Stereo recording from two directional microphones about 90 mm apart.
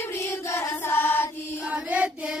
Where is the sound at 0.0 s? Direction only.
30° left (ahead or behind).